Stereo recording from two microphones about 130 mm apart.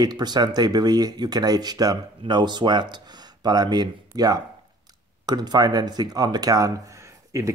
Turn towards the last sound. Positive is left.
turn(degrees=-25)  # may be behind; listen again after turning